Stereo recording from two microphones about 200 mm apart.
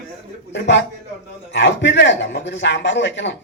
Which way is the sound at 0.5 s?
65° left (ahead or behind).